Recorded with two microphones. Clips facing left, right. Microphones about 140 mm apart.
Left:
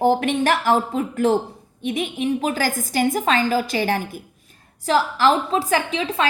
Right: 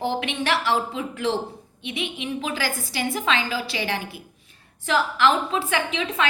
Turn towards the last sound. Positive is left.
turn(degrees=35)  # may be behind; listen again after turning